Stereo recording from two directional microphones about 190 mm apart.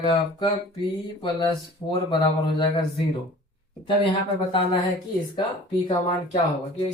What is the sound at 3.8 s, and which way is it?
Speech, 25° left (ahead or behind).